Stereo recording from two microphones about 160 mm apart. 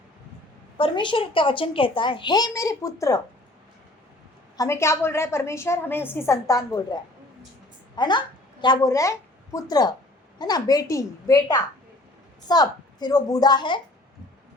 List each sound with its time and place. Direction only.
0.8 s a child's voice: 30° left (ahead or behind)
4.5 s a woman's voice: 20° left (ahead or behind)